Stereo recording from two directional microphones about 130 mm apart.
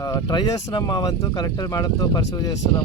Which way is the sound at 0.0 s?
30° left (ahead or behind).